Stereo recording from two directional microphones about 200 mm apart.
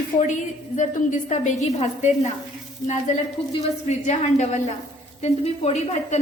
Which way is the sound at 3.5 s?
35° left (ahead or behind).